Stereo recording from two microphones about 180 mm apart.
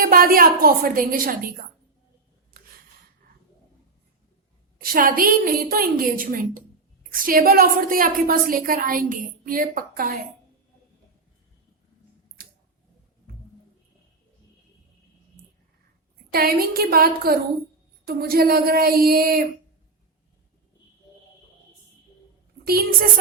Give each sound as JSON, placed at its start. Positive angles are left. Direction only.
{"t": 0.0, "sound": "a woman's voice", "side_deg": -55}
{"t": 4.8, "sound": "a woman's voice", "side_deg": -55}
{"t": 12.4, "sound": "clicking", "side_deg": -55}
{"t": 16.3, "sound": "child singing", "side_deg": -55}
{"t": 22.6, "sound": "a woman's voice", "side_deg": -55}